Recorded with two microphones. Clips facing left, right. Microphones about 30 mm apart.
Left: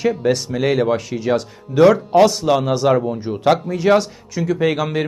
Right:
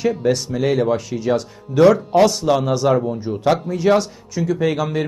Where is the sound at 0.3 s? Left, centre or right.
Left.